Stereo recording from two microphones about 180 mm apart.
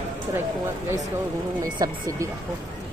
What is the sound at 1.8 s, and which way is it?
Speech, 20° right (ahead or behind).